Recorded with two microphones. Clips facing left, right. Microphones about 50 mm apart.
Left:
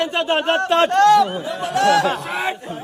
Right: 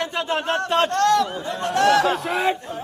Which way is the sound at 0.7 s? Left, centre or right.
Left.